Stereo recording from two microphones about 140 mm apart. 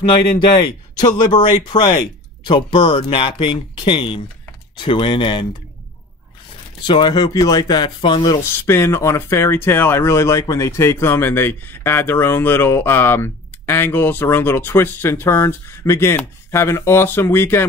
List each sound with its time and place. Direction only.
1.0 s speech: 30° left (ahead or behind)
6.9 s speech: 30° left (ahead or behind)
8.5 s speech: 20° left (ahead or behind)